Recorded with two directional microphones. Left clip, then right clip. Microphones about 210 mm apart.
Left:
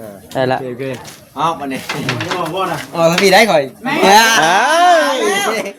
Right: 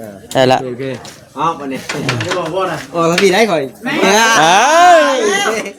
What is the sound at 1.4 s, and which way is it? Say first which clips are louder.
Speech: even; 15° left (ahead or behind).